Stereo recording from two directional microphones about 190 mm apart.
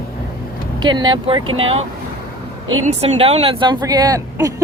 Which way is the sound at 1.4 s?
90° right.